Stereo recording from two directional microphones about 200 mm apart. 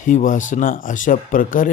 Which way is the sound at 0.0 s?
40° left (ahead or behind).